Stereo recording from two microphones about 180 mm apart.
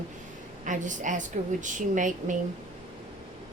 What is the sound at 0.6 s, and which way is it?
Speech, 45° right (ahead or behind).